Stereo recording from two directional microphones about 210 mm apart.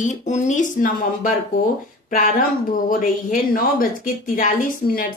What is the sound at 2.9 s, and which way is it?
Speech, 40° left (ahead or behind).